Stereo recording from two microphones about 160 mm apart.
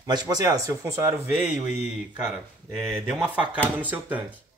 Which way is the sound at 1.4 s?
5° right (ahead or behind).